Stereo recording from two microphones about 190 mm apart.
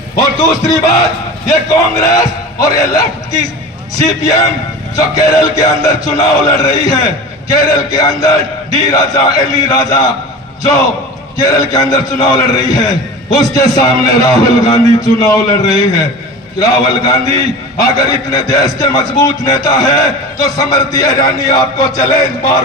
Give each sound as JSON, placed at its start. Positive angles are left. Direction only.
{"t": 0.2, "sound": "speech", "side_deg": 20}
{"t": 2.0, "sound": "a man's voice", "side_deg": 20}
{"t": 11.3, "sound": "a man's voice", "side_deg": 20}